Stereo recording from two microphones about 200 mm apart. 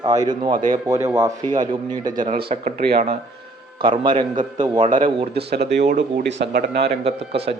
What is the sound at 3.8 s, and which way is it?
A man's voice, 25° right (ahead or behind).